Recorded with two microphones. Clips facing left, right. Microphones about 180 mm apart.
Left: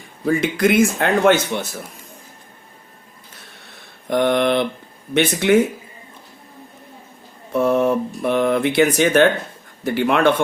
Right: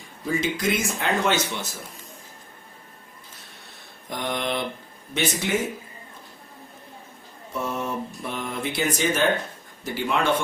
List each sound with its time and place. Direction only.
0.3 s speech: 60° left (ahead or behind)
4.1 s speech: 65° left (ahead or behind)
7.5 s speech: 65° left (ahead or behind)